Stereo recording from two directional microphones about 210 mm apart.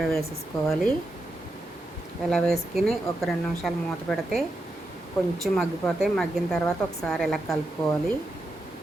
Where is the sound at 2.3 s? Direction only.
Centre (ahead or behind).